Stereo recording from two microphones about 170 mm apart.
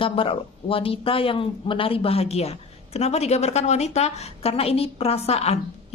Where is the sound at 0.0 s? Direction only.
30° left (ahead or behind).